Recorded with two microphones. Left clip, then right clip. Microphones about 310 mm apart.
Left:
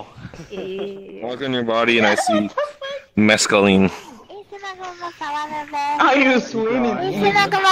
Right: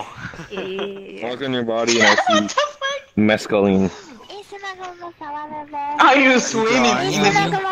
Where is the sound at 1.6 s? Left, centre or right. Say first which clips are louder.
Left 3 dB; left.